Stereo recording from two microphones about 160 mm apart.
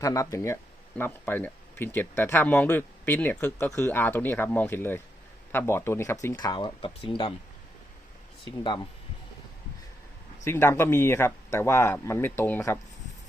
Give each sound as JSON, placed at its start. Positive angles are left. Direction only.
{"t": 0.0, "sound": "speech", "side_deg": 20}
{"t": 8.4, "sound": "speech", "side_deg": 30}
{"t": 10.4, "sound": "speech", "side_deg": 15}